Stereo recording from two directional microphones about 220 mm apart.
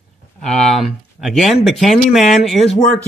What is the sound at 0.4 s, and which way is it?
Speech, centre (ahead or behind).